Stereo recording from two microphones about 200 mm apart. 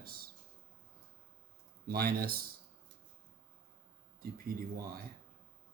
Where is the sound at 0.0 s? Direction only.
50° right (ahead or behind).